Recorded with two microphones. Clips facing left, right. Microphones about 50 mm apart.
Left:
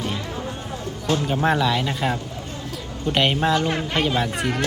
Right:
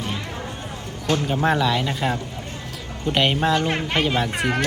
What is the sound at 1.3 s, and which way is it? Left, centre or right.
Speech, centre.